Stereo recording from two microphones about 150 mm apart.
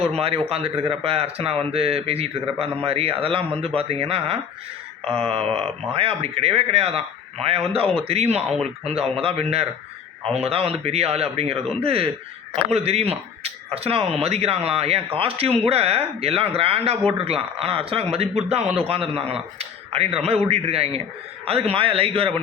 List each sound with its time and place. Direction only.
0.0 s speech: 40° right (ahead or behind)
5.0 s mantra: 5° left (ahead or behind)
5.3 s speech: 40° right (ahead or behind)